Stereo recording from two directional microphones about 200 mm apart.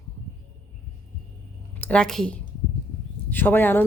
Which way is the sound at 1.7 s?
5° left (ahead or behind).